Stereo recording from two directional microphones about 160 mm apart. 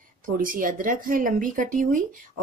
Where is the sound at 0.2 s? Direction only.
60° right (ahead or behind).